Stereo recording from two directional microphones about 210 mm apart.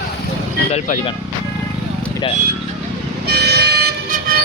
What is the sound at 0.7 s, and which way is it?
Speech, 30° left (ahead or behind).